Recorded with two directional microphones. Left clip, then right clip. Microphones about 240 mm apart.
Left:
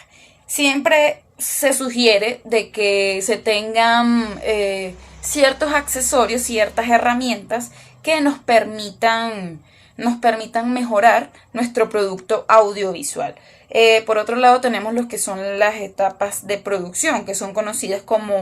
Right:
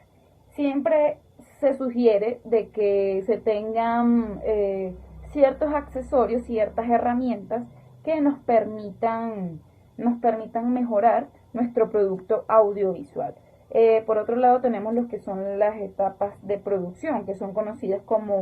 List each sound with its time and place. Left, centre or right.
0.5 s a woman's voice: centre